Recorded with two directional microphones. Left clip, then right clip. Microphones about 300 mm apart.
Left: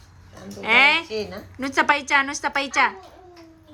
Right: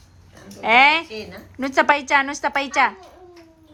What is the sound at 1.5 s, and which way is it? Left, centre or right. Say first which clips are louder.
A woman's voice: right 3 dB; centre.